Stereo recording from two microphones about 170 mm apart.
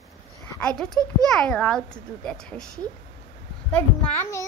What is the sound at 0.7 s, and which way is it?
A child's voice, 5° left (ahead or behind).